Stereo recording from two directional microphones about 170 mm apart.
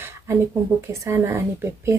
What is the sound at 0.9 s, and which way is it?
Speech, 15° right (ahead or behind).